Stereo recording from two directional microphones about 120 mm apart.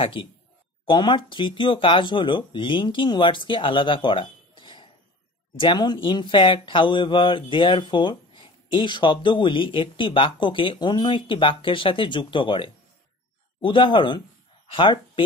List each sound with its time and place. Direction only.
0.0 s speech: 45° left (ahead or behind)